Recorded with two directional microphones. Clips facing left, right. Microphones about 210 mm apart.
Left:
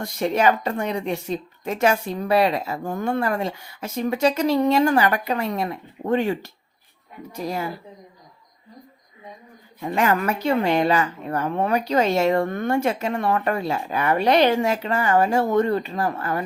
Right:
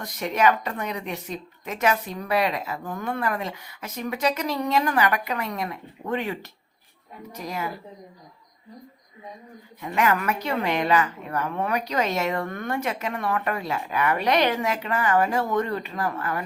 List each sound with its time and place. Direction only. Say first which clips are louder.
0.0 s a woman's voice: left 3 dB; 30° left (ahead or behind)
9.8 s a woman's voice: left 2 dB; 30° left (ahead or behind)